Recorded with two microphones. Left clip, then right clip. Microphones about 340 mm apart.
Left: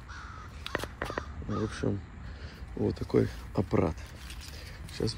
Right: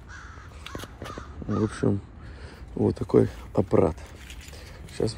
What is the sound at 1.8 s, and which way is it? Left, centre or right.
Speech, right.